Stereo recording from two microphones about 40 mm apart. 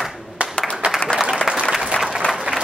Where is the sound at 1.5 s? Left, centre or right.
Right.